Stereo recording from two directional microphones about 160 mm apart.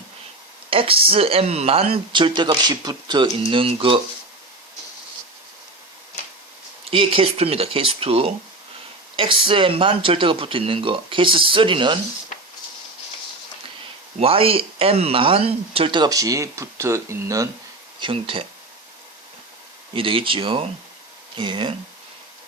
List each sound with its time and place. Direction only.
0.7 s speech: 35° right (ahead or behind)
6.9 s speech: 35° right (ahead or behind)
14.2 s speech: 35° right (ahead or behind); by 17.5 s 20° right (ahead or behind)
18.0 s speech: 35° right (ahead or behind)
19.9 s speech: 35° right (ahead or behind)